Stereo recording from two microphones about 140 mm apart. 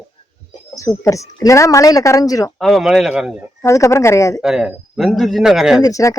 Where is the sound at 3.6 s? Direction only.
20° left (ahead or behind).